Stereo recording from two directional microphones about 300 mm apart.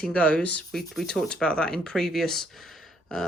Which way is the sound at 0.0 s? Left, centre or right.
Centre.